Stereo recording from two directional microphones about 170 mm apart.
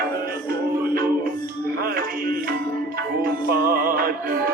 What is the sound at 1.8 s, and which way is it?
Music, 60° right (ahead or behind).